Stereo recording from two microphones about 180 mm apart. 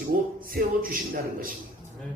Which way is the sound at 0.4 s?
50° right (ahead or behind).